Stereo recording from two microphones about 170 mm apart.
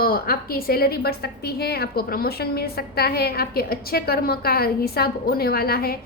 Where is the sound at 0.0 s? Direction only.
60° left (ahead or behind).